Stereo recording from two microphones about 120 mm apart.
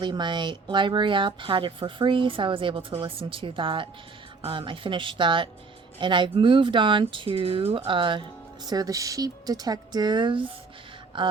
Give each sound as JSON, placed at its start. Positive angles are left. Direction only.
{"t": 0.0, "sound": "speech", "side_deg": -40}
{"t": 8.6, "sound": "speech", "side_deg": -30}